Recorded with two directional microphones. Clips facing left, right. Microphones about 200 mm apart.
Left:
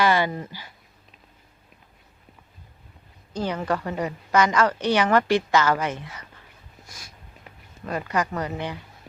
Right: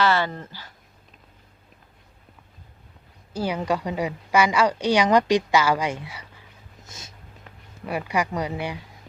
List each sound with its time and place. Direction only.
0.0 s speech: 15° left (ahead or behind)
3.3 s a woman's voice: 10° right (ahead or behind)
6.8 s a sound: 25° right (ahead or behind)
7.9 s a woman's voice: 10° right (ahead or behind)